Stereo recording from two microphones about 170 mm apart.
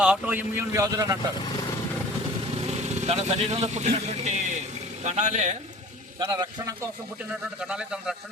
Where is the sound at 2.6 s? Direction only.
40° right (ahead or behind).